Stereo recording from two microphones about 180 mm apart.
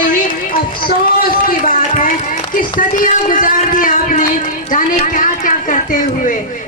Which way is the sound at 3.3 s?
50° left (ahead or behind).